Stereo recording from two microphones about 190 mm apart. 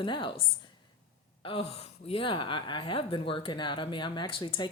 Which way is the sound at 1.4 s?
30° left (ahead or behind).